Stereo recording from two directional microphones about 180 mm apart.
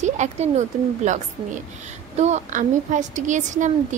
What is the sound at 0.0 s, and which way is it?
A woman's voice, 40° right (ahead or behind).